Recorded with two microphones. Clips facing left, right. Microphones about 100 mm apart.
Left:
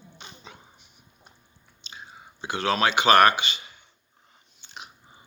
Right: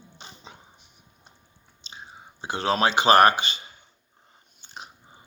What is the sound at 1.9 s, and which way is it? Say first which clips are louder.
Speech: even; 30° right (ahead or behind).